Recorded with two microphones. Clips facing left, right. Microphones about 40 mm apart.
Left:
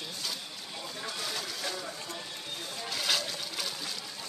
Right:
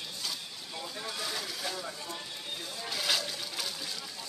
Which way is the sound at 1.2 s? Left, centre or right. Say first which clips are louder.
Left 1 dB; centre.